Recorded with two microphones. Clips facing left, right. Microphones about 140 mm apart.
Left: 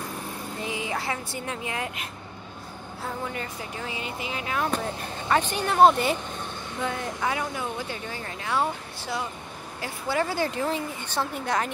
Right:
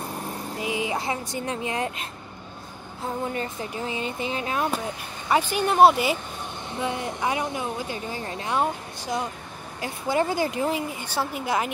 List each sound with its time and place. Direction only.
0.6 s speech: 15° right (ahead or behind)
3.3 s a woman's voice: 25° right (ahead or behind)
5.3 s a woman's voice: 10° right (ahead or behind)
6.8 s a woman's voice: 20° right (ahead or behind)